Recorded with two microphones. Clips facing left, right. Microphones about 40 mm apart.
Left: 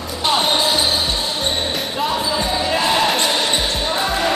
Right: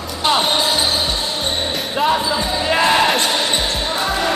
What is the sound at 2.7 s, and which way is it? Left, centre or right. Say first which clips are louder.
Basketball bounce: right 5 dB; right.